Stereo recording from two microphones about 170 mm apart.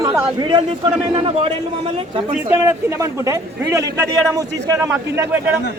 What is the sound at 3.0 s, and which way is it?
A man's voice, 20° right (ahead or behind).